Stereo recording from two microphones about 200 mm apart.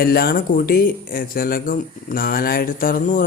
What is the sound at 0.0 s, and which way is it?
Speech, 50° left (ahead or behind).